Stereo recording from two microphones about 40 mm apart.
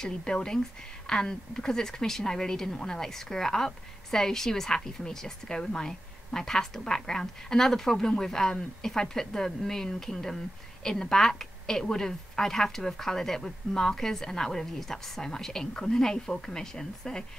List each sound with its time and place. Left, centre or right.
0.0 s speech: centre